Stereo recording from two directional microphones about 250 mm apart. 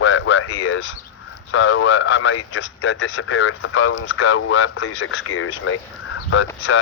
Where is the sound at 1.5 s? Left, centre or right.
Left.